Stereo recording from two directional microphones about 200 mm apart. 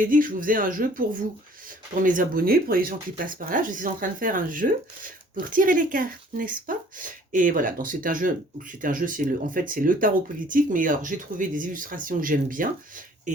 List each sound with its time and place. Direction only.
0.0 s speech: 45° right (ahead or behind)